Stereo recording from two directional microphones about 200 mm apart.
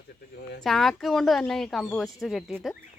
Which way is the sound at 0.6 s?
Centre (ahead or behind).